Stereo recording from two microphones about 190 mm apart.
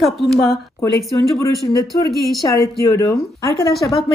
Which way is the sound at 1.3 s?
20° left (ahead or behind).